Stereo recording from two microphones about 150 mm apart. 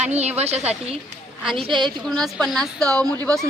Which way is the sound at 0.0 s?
45° right (ahead or behind).